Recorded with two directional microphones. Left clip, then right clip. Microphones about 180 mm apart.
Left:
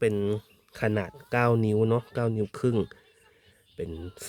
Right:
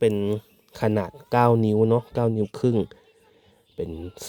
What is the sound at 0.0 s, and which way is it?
Speech, 20° right (ahead or behind).